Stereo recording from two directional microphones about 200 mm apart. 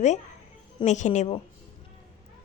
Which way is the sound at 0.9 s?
35° left (ahead or behind).